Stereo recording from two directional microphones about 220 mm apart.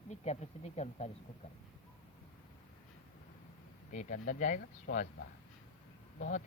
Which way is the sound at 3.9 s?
35° left (ahead or behind).